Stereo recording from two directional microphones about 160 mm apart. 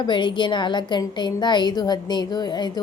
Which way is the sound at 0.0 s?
30° left (ahead or behind).